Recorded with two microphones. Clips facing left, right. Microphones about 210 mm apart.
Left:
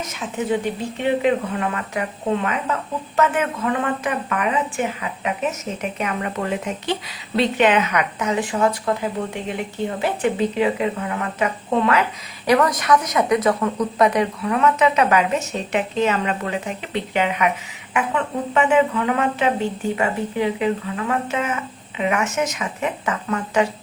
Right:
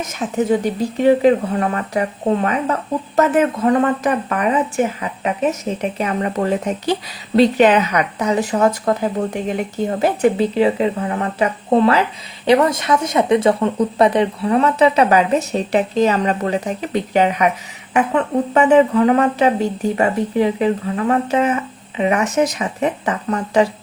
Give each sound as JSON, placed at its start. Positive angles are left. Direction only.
{"t": 0.5, "sound": "speech", "side_deg": -40}